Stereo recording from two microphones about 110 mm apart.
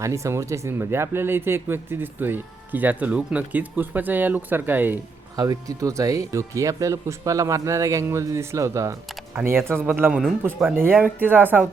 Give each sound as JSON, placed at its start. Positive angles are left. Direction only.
{"t": 0.0, "sound": "speech", "side_deg": -30}
{"t": 5.4, "sound": "speech", "side_deg": -30}